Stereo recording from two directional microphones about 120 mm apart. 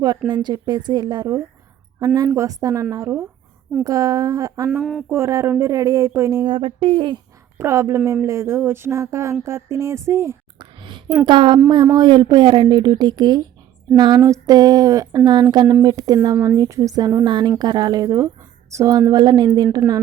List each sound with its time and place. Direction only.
0.4 s speech: 35° right (ahead or behind)
3.8 s speech: 30° right (ahead or behind)
4.8 s speech: centre (ahead or behind)
5.0 s speech: 20° right (ahead or behind)
6.4 s speech: 45° right (ahead or behind)
7.6 s speech: 25° right (ahead or behind)
10.6 s a sound: 40° right (ahead or behind)
11.3 s speech: 40° right (ahead or behind)